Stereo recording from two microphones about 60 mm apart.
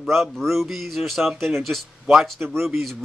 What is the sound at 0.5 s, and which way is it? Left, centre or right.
Speech, centre.